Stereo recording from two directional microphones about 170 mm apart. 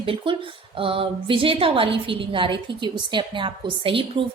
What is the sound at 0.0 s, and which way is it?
A woman's voice, 30° right (ahead or behind).